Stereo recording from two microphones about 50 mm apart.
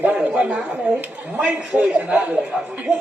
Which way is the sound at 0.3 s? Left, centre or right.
Right.